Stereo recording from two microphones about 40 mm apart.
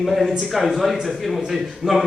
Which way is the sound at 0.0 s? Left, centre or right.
Centre.